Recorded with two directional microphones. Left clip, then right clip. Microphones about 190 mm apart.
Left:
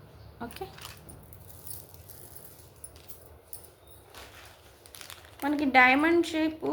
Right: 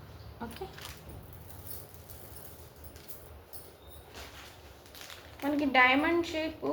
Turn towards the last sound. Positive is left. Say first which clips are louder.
# left 5 dB
turn(degrees=45)  # may be behind; listen again after turning